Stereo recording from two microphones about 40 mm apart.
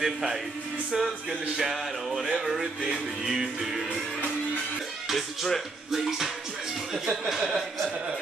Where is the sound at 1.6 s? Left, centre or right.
Centre.